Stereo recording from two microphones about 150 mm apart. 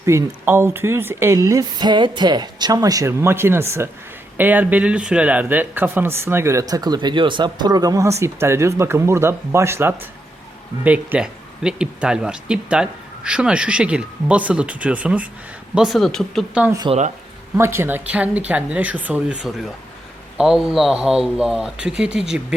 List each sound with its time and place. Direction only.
0.0 s speech: 20° right (ahead or behind); by 16.6 s centre (ahead or behind)
16.9 s speech: 30° right (ahead or behind)
17.6 s speech: 15° right (ahead or behind)